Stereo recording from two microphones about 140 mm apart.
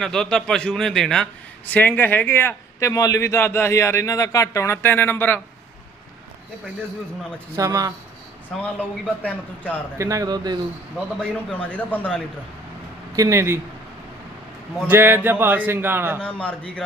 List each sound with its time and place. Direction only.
0.0 s a man's voice: 5° left (ahead or behind)
7.5 s a man's voice: 25° right (ahead or behind)
8.6 s a man's voice: 10° left (ahead or behind)
10.0 s a man's voice: 25° right (ahead or behind)
11.2 s a man's voice: 10° left (ahead or behind)
13.1 s a man's voice: 20° right (ahead or behind)
14.8 s a man's voice: 15° right (ahead or behind)
16.2 s a man's voice: 10° left (ahead or behind)